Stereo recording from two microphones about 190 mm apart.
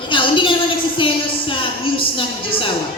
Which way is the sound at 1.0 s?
25° left (ahead or behind).